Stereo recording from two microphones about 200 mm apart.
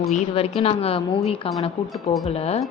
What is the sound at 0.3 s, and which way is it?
A woman's voice, 30° left (ahead or behind).